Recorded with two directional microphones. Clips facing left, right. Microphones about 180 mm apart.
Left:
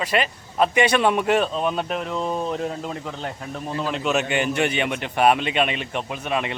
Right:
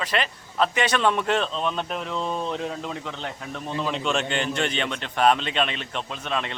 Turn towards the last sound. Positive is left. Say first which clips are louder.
# left 4 dB
turn(degrees=10)  # may be behind; listen again after turning